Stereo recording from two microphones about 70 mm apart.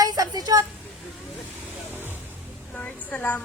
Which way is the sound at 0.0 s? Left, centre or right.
Right.